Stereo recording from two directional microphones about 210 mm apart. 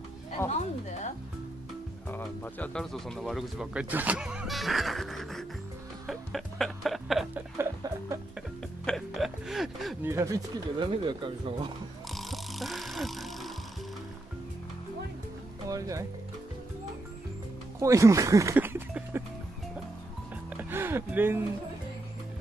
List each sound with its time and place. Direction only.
0.5 s a woman's voice: 35° left (ahead or behind)
2.0 s speech: 10° left (ahead or behind)
6.0 s music: centre (ahead or behind)
7.5 s music: 15° right (ahead or behind)
8.4 s music: centre (ahead or behind)
10.0 s speech: 15° right (ahead or behind)
12.1 s music: centre (ahead or behind)
15.7 s music: 15° right (ahead or behind)
17.7 s a sound: 15° right (ahead or behind)
20.4 s music: 10° right (ahead or behind)